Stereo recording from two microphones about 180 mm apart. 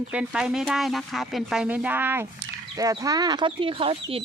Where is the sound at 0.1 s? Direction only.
5° right (ahead or behind).